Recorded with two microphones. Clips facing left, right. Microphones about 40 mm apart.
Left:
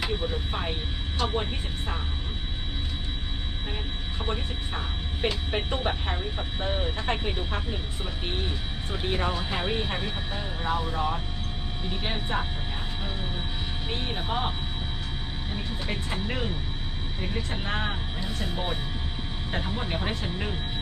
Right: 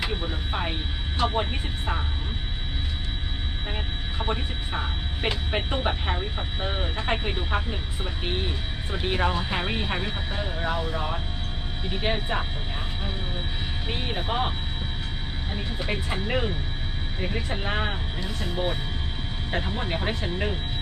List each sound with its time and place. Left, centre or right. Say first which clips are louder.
0.0 s speech: even; centre
4.2 s speech: right 3 dB; centre
13.8 s speech: right 2 dB; centre
15.5 s speech: right 3 dB; centre